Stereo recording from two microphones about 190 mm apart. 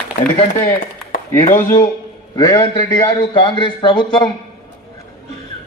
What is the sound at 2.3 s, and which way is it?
A man's voice, 20° left (ahead or behind).